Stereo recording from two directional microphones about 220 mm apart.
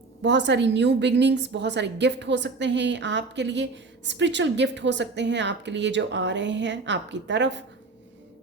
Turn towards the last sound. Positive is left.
turn(degrees=-55)  # may be behind; listen again after turning